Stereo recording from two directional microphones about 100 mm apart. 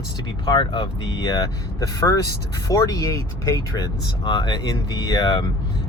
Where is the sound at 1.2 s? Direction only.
40° left (ahead or behind).